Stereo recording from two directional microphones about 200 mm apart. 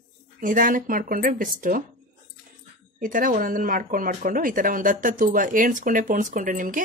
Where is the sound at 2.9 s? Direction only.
45° right (ahead or behind).